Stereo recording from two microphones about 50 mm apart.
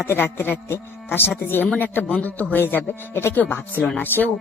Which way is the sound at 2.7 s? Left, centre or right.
Left.